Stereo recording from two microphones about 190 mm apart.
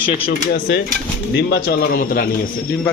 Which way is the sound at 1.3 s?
60° left (ahead or behind).